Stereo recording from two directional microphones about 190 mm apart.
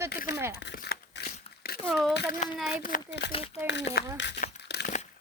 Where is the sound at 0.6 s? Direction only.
60° left (ahead or behind).